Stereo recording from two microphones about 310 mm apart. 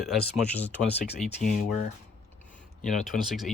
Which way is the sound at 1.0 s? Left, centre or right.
Left.